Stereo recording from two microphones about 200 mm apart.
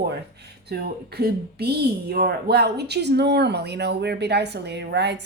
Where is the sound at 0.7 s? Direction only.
50° right (ahead or behind).